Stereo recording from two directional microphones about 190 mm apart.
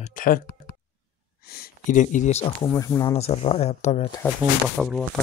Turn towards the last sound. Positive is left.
turn(degrees=0)  # may be behind; listen again after turning